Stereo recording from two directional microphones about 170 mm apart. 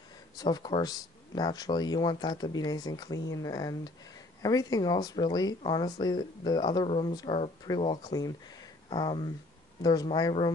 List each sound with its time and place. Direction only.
0.4 s speech: 25° left (ahead or behind)